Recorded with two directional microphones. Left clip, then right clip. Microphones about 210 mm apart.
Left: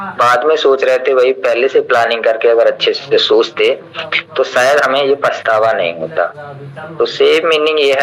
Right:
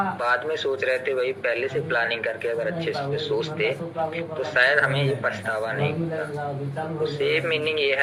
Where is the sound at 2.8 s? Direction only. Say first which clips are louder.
Left 15 dB; 10° right (ahead or behind).